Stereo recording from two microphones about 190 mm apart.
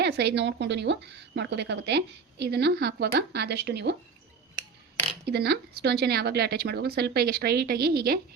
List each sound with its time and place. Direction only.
0.0 s a woman's voice: 60° right (ahead or behind)
5.2 s a woman's voice: 60° right (ahead or behind)